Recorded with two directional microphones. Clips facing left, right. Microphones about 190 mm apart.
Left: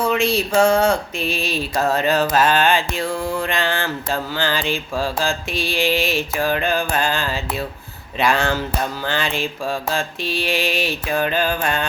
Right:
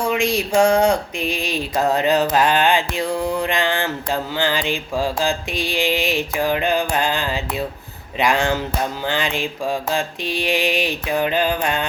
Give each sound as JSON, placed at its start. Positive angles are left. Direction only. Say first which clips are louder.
{"t": 0.0, "sound": "mantra", "louder": "left 1 dB", "side_deg": -15}